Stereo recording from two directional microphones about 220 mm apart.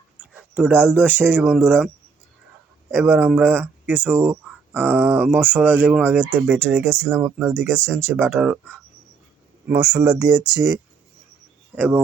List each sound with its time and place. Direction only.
0.2 s speech: 5° right (ahead or behind)
2.9 s speech: 10° right (ahead or behind)
7.8 s speech: 5° left (ahead or behind)
8.0 s speech: 5° right (ahead or behind)
9.7 s speech: 20° right (ahead or behind)